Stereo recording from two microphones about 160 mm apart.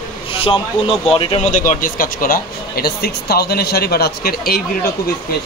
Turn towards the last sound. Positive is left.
turn(degrees=70)  # may be behind; listen again after turning